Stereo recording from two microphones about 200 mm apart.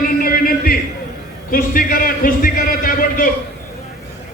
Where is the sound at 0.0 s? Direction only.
45° left (ahead or behind).